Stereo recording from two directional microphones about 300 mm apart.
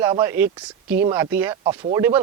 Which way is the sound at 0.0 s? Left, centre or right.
Centre.